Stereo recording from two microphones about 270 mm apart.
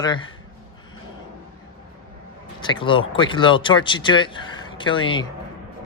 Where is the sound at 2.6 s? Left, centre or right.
Centre.